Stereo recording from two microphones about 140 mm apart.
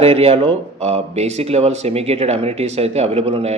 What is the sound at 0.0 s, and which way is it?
Speech, 45° right (ahead or behind).